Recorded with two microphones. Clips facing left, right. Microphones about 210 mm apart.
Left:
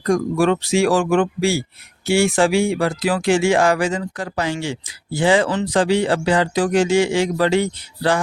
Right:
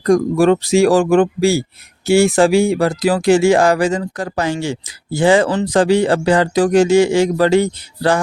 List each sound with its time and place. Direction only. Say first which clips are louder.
0.0 s speech: right 5 dB; 40° right (ahead or behind)